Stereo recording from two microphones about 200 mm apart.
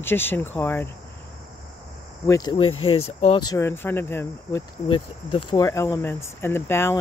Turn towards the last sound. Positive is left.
turn(degrees=10)  # may be behind; listen again after turning